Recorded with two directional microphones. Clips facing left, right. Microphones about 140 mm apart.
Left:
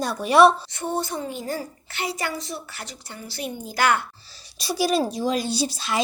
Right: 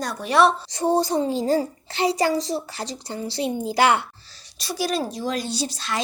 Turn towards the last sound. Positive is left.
turn(degrees=10)  # may be behind; listen again after turning